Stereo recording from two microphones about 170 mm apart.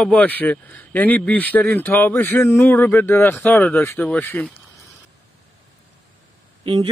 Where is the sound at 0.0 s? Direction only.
10° left (ahead or behind).